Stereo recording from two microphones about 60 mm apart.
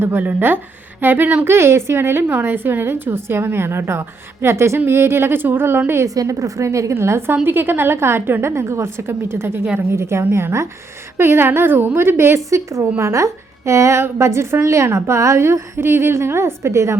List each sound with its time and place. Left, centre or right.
0.2 s a woman's voice: right
1.5 s a woman's voice: right
6.1 s a woman's voice: right
7.4 s a woman's voice: right
12.5 s a woman's voice: right